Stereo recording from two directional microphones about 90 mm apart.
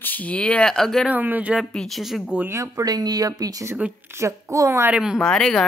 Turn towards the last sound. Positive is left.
turn(degrees=5)  # may be behind; listen again after turning